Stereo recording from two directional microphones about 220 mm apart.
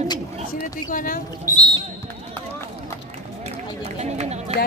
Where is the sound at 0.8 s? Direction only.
40° left (ahead or behind).